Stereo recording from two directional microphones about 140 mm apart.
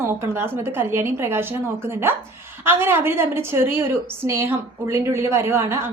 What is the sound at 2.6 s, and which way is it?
A woman's voice, 15° right (ahead or behind).